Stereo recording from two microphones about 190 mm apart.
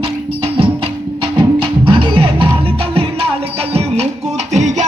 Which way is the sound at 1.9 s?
25° right (ahead or behind).